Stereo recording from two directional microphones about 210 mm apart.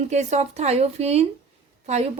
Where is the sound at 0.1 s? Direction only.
35° right (ahead or behind).